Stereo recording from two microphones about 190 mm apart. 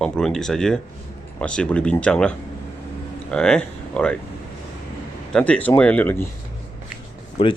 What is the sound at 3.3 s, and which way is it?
Speech, 5° left (ahead or behind).